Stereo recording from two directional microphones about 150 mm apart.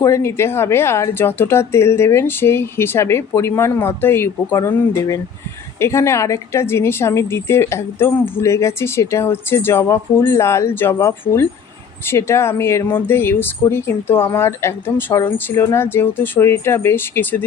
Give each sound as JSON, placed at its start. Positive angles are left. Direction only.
{"t": 0.0, "sound": "a woman's voice", "side_deg": 20}